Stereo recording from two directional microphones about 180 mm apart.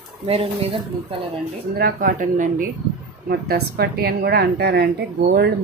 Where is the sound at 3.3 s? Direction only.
60° right (ahead or behind).